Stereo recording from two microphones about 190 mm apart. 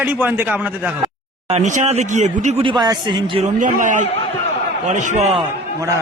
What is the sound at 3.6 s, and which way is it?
Speech, 40° right (ahead or behind).